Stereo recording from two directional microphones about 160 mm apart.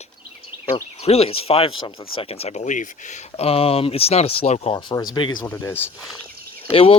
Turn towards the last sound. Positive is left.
turn(degrees=35)  # may be behind; listen again after turning